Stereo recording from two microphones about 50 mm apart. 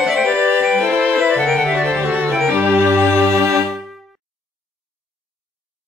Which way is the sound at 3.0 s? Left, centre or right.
Right.